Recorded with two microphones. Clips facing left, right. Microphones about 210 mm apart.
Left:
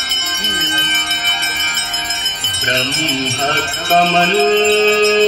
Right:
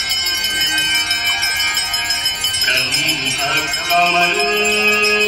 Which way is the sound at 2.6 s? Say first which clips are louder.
Left 8 dB; 55° left (ahead or behind).